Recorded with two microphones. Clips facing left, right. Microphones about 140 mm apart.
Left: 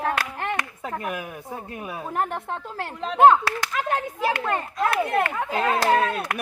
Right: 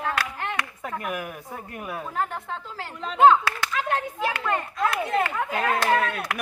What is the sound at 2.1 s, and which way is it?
Speech, 60° left (ahead or behind).